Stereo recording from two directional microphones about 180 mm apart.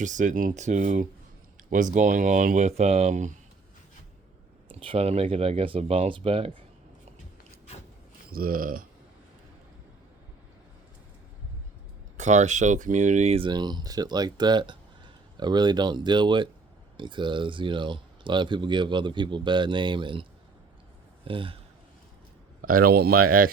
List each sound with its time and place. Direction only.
0.0 s speech: 45° right (ahead or behind)
4.7 s speech: 30° right (ahead or behind)
8.3 s speech: 55° right (ahead or behind)
12.1 s speech: 40° right (ahead or behind)
13.5 s speech: 25° right (ahead or behind)
21.2 s speech: 30° right (ahead or behind)
22.6 s speech: 55° right (ahead or behind)